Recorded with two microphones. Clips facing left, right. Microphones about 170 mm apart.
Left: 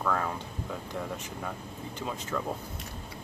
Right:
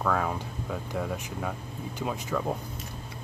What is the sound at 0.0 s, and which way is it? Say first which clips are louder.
Speech: right 3 dB; 5° right (ahead or behind).